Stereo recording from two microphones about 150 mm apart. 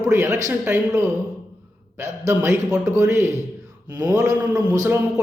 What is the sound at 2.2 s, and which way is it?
A man's voice, 15° right (ahead or behind).